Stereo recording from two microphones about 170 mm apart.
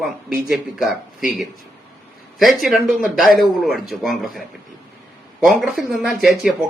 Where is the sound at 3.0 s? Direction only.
55° left (ahead or behind).